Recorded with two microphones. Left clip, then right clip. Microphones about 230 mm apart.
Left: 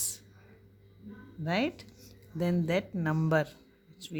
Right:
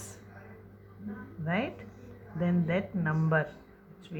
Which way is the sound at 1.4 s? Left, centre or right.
Left.